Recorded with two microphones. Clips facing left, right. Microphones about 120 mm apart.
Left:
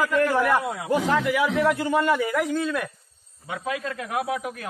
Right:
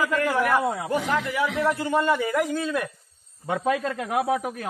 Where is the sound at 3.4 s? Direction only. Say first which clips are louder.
Right 5 dB; 45° right (ahead or behind).